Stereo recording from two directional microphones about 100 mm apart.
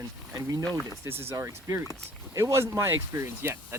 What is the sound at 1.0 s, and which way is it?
Speech, 25° right (ahead or behind).